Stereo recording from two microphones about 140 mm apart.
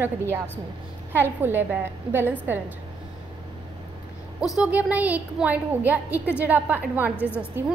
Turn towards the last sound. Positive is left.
turn(degrees=-10)  # may be behind; listen again after turning